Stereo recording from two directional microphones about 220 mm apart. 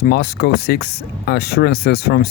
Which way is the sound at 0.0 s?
50° left (ahead or behind).